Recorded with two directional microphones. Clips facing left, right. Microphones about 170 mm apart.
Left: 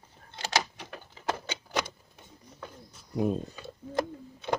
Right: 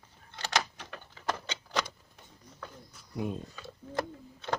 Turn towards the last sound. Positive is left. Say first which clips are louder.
# left 3 dB
turn(degrees=15)  # may be behind; listen again after turning